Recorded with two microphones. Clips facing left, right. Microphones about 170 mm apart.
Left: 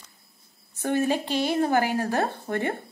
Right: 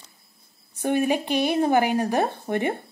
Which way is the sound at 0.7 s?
15° right (ahead or behind).